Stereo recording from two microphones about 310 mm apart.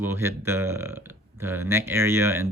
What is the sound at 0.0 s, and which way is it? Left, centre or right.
Speech, centre.